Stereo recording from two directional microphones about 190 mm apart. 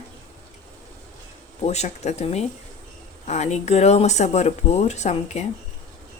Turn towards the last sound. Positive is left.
turn(degrees=35)  # may be behind; listen again after turning